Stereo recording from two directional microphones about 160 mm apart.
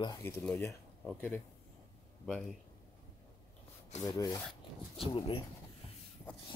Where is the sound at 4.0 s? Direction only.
20° left (ahead or behind).